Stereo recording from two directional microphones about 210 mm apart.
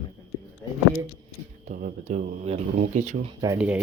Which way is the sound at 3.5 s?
5° right (ahead or behind).